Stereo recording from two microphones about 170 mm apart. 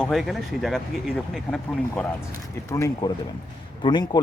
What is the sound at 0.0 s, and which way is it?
Speech, centre (ahead or behind).